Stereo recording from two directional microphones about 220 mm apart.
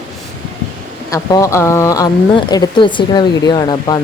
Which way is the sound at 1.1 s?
15° left (ahead or behind).